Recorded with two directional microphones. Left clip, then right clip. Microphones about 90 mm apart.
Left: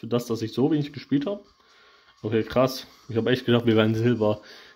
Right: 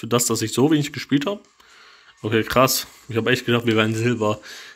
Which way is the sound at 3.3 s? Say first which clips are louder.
Even; 35° left (ahead or behind).